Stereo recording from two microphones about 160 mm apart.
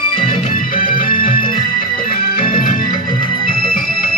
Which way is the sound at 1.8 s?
65° left (ahead or behind).